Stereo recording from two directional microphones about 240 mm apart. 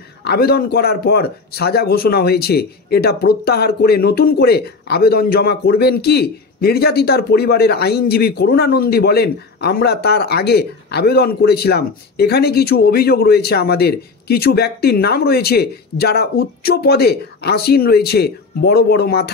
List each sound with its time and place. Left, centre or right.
0.2 s a man's voice: left